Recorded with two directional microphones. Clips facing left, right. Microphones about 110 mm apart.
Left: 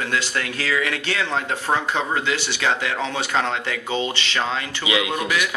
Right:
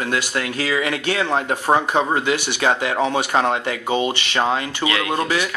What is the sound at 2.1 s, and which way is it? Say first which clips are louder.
Speech: right 3 dB; 15° right (ahead or behind).